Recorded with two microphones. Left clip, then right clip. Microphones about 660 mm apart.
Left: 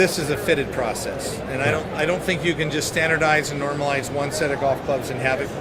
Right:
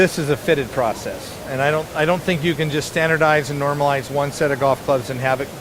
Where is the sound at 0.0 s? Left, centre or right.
Right.